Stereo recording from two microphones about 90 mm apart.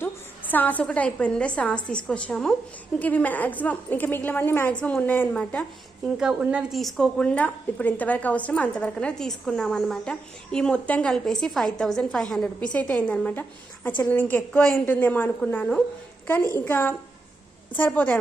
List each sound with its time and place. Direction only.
0.5 s a woman's voice: 20° left (ahead or behind)
3.0 s a woman's voice: 15° left (ahead or behind)
6.1 s a woman's voice: 10° right (ahead or behind)
6.7 s a woman's voice: centre (ahead or behind); by 18.2 s 15° left (ahead or behind)